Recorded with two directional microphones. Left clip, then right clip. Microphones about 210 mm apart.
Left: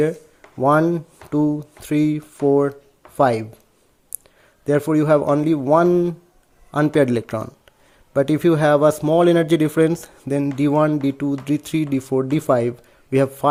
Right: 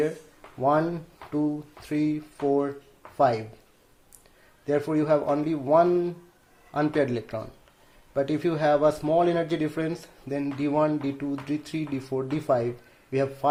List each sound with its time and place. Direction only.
0.6 s speech: 50° left (ahead or behind)
4.6 s speech: 55° left (ahead or behind)